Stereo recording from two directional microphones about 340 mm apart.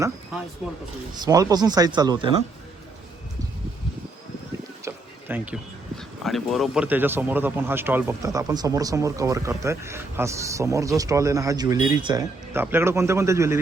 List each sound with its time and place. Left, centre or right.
0.6 s speech: centre
4.9 s boat: centre
6.0 s speech: centre